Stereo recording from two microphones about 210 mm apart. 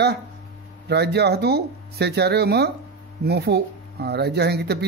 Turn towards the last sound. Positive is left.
turn(degrees=-50)  # may be behind; listen again after turning